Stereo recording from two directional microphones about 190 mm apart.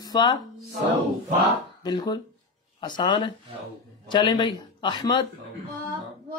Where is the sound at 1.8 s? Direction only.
25° left (ahead or behind).